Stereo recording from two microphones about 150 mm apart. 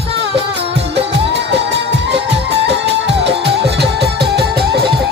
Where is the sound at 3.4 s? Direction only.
90° right.